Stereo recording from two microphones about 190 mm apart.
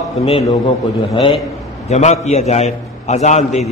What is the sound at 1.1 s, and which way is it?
A man's voice, 25° left (ahead or behind).